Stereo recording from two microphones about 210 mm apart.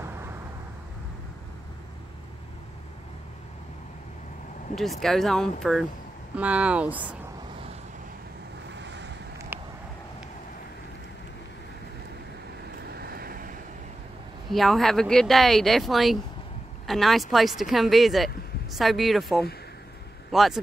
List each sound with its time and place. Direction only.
4.7 s speech: centre (ahead or behind)
8.7 s boat: 55° right (ahead or behind)
9.5 s a sound: 10° right (ahead or behind)
12.8 s vehicle: 50° right (ahead or behind)
14.5 s a man's voice: centre (ahead or behind)